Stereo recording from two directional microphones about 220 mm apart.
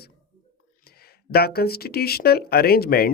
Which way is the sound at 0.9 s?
45° left (ahead or behind).